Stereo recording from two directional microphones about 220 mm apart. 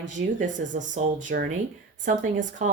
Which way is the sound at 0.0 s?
35° right (ahead or behind).